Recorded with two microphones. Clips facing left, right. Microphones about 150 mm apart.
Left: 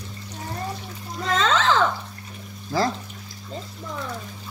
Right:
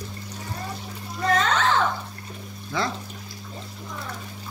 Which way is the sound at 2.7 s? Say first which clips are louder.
Left 4 dB; 35° left (ahead or behind).